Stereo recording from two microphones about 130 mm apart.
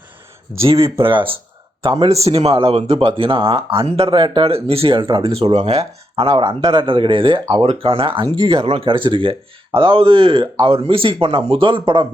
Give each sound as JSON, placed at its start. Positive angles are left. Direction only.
{"t": 0.8, "sound": "speech", "side_deg": -25}
{"t": 1.0, "sound": "speech", "side_deg": -40}